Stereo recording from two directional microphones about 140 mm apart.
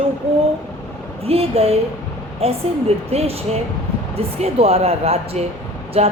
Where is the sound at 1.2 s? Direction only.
45° right (ahead or behind).